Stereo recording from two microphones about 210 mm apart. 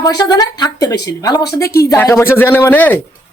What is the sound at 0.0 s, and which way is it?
A man's voice, 20° left (ahead or behind).